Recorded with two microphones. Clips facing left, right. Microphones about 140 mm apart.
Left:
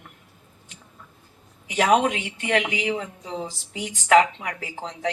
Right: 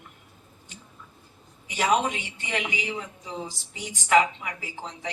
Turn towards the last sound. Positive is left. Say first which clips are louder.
# left 6 dB
turn(degrees=80)